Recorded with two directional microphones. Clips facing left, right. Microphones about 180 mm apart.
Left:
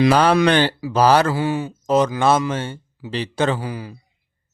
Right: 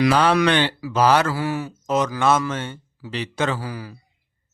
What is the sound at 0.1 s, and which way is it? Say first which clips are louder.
Speech: left 3 dB; 40° left (ahead or behind).